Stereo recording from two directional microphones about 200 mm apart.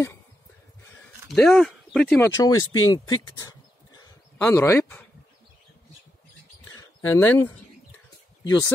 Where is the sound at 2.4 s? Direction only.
15° left (ahead or behind).